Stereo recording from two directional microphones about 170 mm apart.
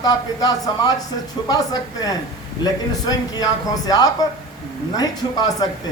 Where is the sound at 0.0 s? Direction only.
25° left (ahead or behind).